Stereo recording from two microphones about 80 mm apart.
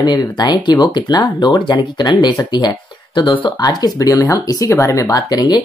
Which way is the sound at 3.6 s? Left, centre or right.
Left.